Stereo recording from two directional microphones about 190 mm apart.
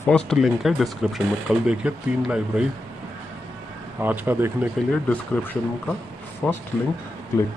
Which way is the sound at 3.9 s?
10° right (ahead or behind).